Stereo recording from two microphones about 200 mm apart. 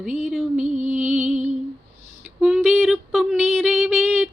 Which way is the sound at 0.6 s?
35° right (ahead or behind).